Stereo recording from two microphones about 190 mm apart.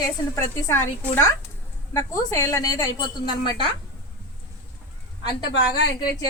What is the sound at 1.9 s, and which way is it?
A woman's voice, 15° left (ahead or behind).